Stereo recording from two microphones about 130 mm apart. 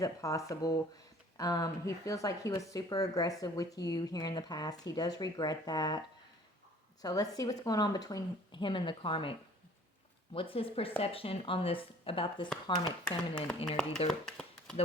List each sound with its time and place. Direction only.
0.0 s speech: 25° left (ahead or behind)
7.0 s speech: 30° left (ahead or behind)
10.3 s speech: 45° left (ahead or behind)
13.1 s speech: 10° left (ahead or behind)
14.1 s a sound: 5° left (ahead or behind)